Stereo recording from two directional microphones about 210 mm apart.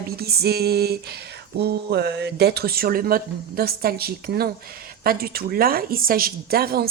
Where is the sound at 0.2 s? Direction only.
50° right (ahead or behind).